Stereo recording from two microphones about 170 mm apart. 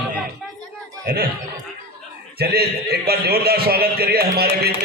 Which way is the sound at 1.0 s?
60° right (ahead or behind).